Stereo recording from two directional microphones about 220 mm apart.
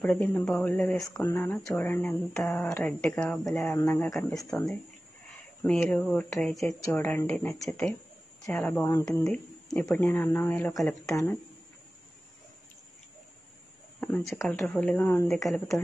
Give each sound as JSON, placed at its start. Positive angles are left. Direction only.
{"t": 0.0, "sound": "a woman's voice", "side_deg": 10}
{"t": 4.4, "sound": "a woman's voice", "side_deg": 15}
{"t": 13.9, "sound": "speech", "side_deg": 10}